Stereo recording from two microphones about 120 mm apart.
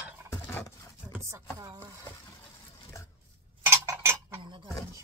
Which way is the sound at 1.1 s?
25° right (ahead or behind).